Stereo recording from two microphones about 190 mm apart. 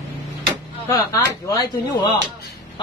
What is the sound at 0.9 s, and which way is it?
Speech, 20° left (ahead or behind).